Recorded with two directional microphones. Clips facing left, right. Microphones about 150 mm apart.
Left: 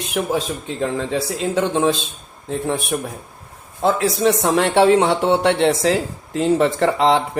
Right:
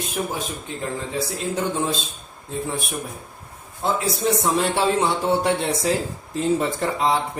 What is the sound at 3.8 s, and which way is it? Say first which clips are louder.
A man's voice: left 6 dB; 90° left.